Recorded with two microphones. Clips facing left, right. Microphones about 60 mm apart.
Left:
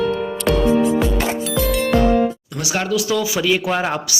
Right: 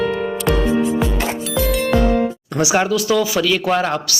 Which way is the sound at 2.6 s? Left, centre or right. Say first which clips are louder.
Right 7 dB; centre.